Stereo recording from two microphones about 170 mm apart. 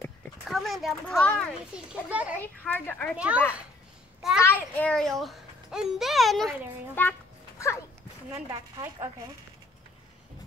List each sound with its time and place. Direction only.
0.5 s speech: centre (ahead or behind)
1.9 s a child's voice: 10° right (ahead or behind)
2.4 s a woman's voice: 10° left (ahead or behind)
3.2 s a child's voice: 5° right (ahead or behind)
4.4 s a child's voice: 10° left (ahead or behind)
7.0 s children playing: 15° left (ahead or behind)